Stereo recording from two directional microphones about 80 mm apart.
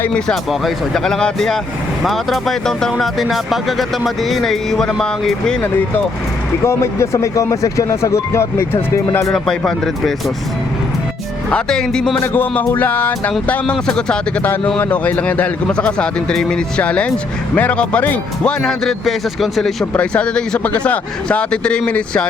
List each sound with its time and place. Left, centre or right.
0.6 s speech: centre
5.6 s music: left
6.7 s speech: left
9.3 s speech: centre
11.5 s speech: centre
12.2 s music: left
13.5 s speech: centre
18.6 s speech: centre
19.8 s speech: centre